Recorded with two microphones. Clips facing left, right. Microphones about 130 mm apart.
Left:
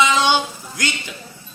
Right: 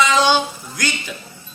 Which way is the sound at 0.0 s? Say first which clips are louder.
Right 1 dB; 20° left (ahead or behind).